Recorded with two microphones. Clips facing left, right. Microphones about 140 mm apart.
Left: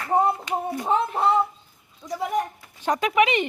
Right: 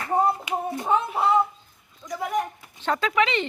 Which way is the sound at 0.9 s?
30° left (ahead or behind).